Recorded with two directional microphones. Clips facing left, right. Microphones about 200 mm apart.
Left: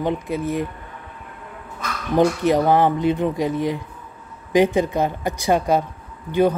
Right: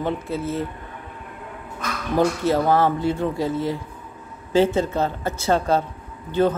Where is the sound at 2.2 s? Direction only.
15° left (ahead or behind).